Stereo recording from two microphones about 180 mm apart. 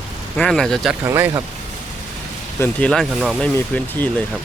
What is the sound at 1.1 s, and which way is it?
Speech, 15° right (ahead or behind).